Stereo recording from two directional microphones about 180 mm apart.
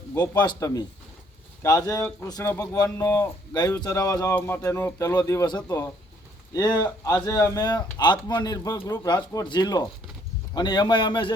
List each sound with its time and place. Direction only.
0.1 s speech: 25° left (ahead or behind)